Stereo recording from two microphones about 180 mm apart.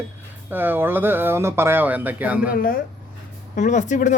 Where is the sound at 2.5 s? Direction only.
50° left (ahead or behind).